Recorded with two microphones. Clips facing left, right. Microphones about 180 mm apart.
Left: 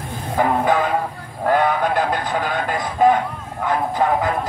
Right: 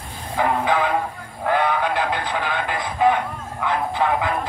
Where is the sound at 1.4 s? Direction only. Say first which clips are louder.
Left 3 dB; 45° left (ahead or behind).